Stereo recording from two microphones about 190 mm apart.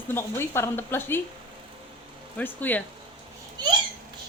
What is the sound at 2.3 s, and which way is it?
Speech, 10° left (ahead or behind).